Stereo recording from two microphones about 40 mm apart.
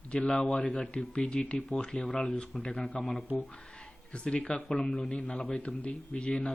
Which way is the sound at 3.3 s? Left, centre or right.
Left.